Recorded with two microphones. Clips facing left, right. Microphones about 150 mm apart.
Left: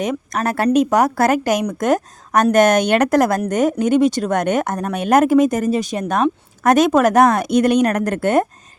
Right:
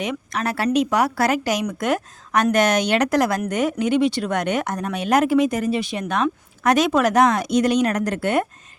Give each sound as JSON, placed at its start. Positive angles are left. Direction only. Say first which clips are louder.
{"t": 0.0, "sound": "speech", "louder": "left 4 dB", "side_deg": 40}